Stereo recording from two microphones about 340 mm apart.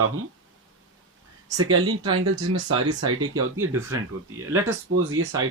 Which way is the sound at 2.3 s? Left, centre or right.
Centre.